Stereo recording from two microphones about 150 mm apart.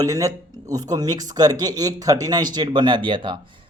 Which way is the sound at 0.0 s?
25° right (ahead or behind).